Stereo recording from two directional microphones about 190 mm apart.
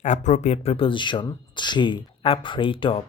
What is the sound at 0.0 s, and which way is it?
Speech, 40° left (ahead or behind).